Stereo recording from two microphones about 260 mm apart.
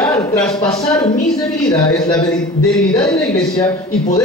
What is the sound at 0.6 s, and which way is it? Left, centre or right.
Speech, centre.